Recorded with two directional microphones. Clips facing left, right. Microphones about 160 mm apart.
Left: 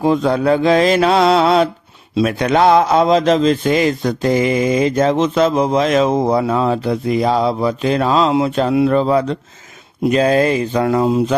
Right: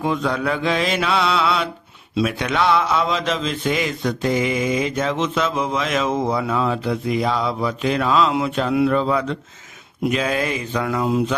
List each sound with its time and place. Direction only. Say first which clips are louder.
0.0 s speech: left 7 dB; 35° left (ahead or behind)